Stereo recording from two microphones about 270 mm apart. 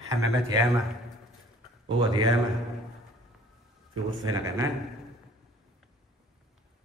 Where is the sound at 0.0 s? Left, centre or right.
Centre.